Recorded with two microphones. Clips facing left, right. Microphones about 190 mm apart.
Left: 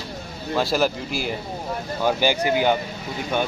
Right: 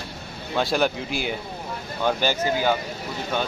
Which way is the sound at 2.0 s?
10° left (ahead or behind).